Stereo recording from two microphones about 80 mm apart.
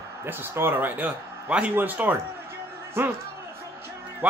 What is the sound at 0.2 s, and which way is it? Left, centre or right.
Speech, right.